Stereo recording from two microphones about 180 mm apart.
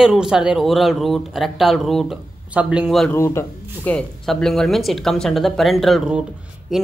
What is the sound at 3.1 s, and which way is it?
Speech, 15° left (ahead or behind).